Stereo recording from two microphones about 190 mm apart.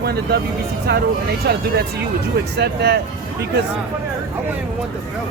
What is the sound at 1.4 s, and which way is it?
Speech, 55° right (ahead or behind).